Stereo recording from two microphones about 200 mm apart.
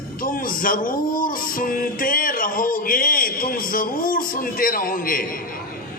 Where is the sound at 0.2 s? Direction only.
45° left (ahead or behind).